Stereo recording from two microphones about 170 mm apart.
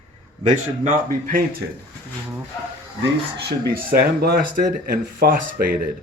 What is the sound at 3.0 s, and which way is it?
Speech, 70° right (ahead or behind).